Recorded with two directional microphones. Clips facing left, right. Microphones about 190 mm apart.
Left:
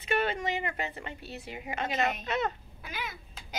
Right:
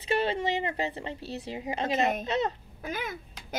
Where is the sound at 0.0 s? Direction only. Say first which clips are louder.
Right 2 dB; 30° right (ahead or behind).